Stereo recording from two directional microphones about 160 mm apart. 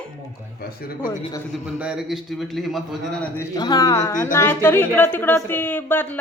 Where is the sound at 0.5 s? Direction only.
70° left (ahead or behind).